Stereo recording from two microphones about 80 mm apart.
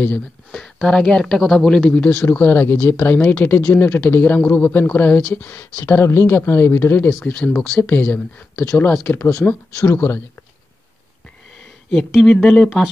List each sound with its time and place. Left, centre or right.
0.0 s speech: centre
7.2 s speech: centre
12.1 s speech: centre